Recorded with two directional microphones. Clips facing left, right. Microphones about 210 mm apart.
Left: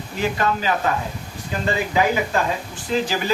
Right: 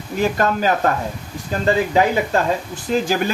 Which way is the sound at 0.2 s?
45° right (ahead or behind).